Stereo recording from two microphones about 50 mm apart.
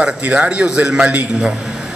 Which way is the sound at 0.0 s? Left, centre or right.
Right.